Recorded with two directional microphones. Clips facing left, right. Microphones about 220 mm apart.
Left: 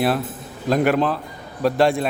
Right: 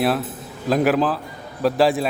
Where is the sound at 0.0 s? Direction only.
Centre (ahead or behind).